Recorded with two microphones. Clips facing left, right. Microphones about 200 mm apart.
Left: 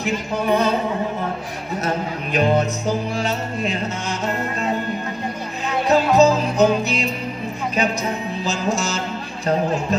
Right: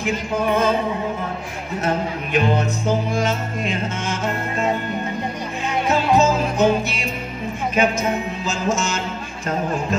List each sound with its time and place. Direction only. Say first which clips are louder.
0.0 s music: right 1 dB; 40° left (ahead or behind)
2.3 s music: left 2 dB; 35° left (ahead or behind)
5.9 s music: left 3 dB; 35° left (ahead or behind)
8.5 s music: even; 35° left (ahead or behind)